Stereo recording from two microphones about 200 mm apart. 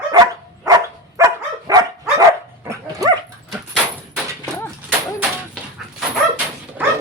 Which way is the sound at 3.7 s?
Centre (ahead or behind).